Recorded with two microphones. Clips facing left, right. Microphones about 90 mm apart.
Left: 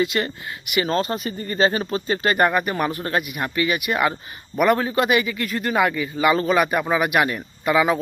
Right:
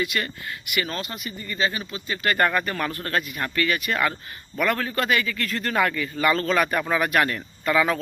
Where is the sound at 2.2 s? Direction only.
20° left (ahead or behind).